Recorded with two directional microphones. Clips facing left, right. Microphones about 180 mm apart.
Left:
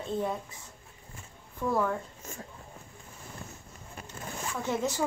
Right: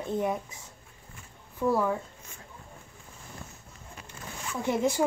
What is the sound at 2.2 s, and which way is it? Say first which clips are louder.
Speech: left 7 dB; 45° left (ahead or behind).